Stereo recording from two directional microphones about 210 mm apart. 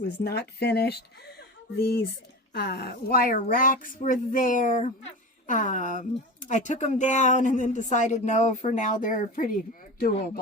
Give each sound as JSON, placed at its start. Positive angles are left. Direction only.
{"t": 0.0, "sound": "speech", "side_deg": 50}